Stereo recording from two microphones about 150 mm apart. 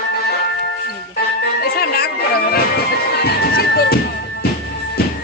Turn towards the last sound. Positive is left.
turn(degrees=90)